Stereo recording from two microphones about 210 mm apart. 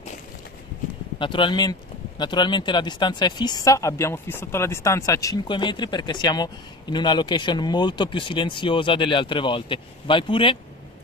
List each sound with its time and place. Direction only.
1.2 s speech: 25° left (ahead or behind)